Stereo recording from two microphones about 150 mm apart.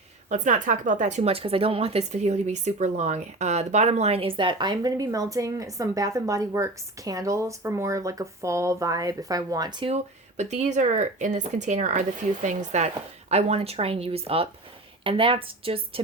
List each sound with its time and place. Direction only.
0.3 s speech: 55° right (ahead or behind); by 9.7 s 25° right (ahead or behind)
9.8 s speech: 45° right (ahead or behind)
13.3 s speech: 45° right (ahead or behind)